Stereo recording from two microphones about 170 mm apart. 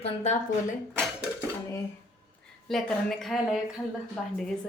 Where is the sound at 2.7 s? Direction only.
Centre (ahead or behind).